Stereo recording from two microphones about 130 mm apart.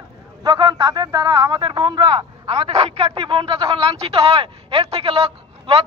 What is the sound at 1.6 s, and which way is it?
A man's voice, 40° right (ahead or behind).